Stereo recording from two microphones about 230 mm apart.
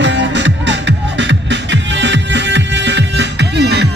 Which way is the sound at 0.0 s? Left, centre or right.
Right.